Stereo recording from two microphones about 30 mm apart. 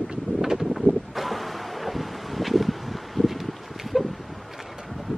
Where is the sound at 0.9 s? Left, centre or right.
Centre.